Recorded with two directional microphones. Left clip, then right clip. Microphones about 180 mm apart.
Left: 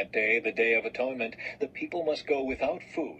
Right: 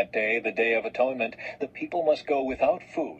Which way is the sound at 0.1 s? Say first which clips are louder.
Right 1 dB; 30° right (ahead or behind).